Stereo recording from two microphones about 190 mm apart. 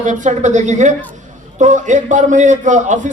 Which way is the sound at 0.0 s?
40° right (ahead or behind).